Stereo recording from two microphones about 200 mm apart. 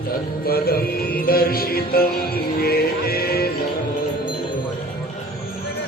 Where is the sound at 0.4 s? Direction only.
50° left (ahead or behind).